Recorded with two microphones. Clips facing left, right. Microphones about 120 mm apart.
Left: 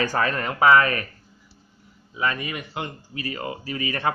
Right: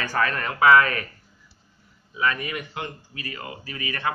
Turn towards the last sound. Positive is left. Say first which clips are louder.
# left 3 dB
turn(degrees=30)  # may be behind; listen again after turning